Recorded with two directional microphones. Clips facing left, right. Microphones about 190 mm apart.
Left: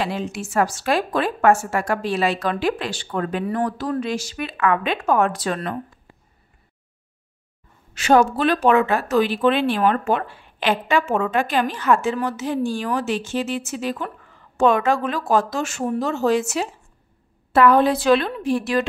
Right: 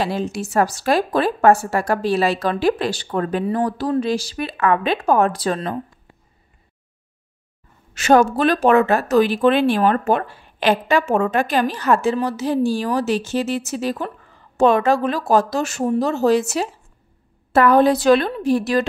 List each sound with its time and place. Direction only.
0.0 s speech: 35° right (ahead or behind)
7.9 s speech: 45° right (ahead or behind)